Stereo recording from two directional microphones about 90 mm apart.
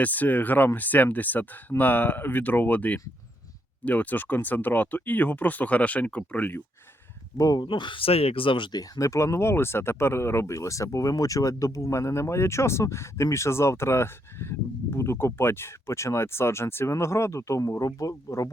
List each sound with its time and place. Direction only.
0.0 s speech: 20° left (ahead or behind)
7.3 s speech: 40° left (ahead or behind)
7.6 s speech: 60° left (ahead or behind)
8.8 s speech: 35° left (ahead or behind)